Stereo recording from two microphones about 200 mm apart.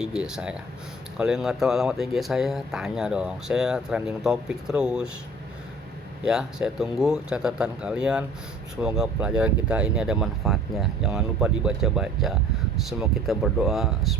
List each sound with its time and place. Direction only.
0.0 s speech: 5° right (ahead or behind)
6.2 s speech: 5° right (ahead or behind)